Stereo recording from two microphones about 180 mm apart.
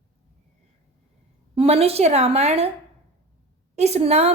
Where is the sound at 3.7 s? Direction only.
35° right (ahead or behind).